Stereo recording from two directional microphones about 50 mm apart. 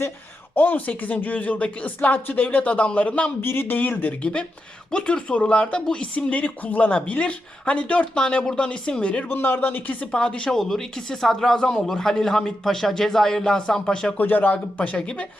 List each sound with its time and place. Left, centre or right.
0.5 s speech: left
3.4 s speech: left
4.2 s speech: left
9.3 s speech: left
10.1 s speech: left
10.5 s a man's voice: centre
14.2 s speech: left